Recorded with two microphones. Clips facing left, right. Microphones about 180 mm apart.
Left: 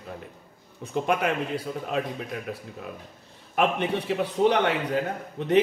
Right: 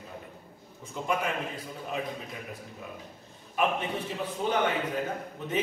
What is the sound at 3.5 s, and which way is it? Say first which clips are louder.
A man's voice: left 4 dB; 70° left (ahead or behind).